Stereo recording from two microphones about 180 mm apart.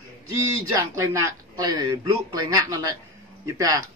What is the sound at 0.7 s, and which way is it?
Speech, 15° right (ahead or behind).